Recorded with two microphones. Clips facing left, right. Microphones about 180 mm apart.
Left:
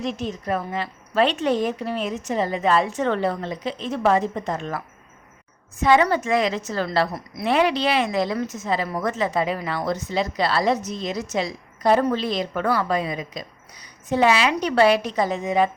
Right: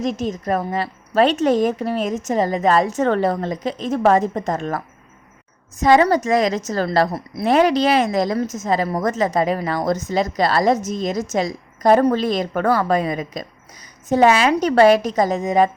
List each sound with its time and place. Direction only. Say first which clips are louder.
0.0 s a woman's voice: right 5 dB; 45° right (ahead or behind)
5.8 s a woman's voice: right 4 dB; 40° right (ahead or behind)